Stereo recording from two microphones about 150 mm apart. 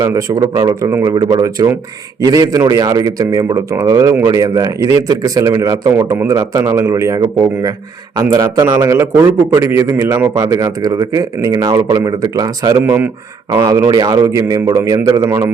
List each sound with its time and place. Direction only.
0.0 s a man's voice: 20° right (ahead or behind)
8.2 s a man's voice: 20° right (ahead or behind)
12.8 s speech: 15° right (ahead or behind)
13.5 s a man's voice: 25° right (ahead or behind)